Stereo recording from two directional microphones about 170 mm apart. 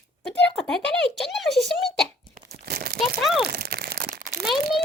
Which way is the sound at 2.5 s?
65° right (ahead or behind).